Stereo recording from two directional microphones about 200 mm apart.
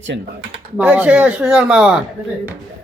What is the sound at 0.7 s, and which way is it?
Speech, 5° right (ahead or behind).